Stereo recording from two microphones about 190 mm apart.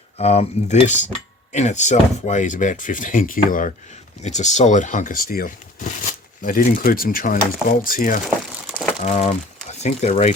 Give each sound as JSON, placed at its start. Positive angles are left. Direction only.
{"t": 0.2, "sound": "speech", "side_deg": 35}
{"t": 9.0, "sound": "speech", "side_deg": 35}